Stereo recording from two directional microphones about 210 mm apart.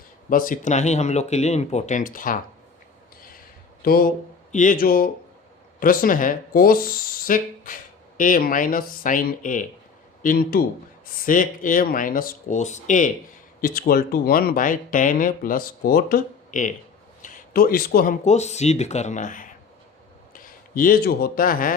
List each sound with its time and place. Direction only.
0.3 s speech: 40° left (ahead or behind)
3.8 s speech: 45° left (ahead or behind)